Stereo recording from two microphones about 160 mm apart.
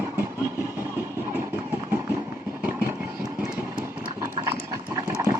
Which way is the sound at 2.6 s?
15° right (ahead or behind).